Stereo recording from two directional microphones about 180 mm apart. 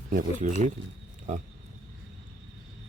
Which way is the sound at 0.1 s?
45° right (ahead or behind).